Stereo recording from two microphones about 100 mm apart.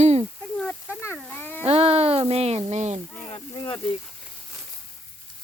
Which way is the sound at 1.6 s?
85° right.